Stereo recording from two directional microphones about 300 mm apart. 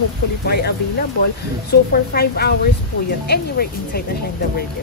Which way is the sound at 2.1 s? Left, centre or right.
Left.